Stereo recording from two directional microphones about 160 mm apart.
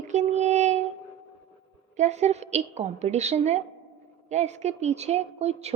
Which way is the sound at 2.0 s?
45° right (ahead or behind).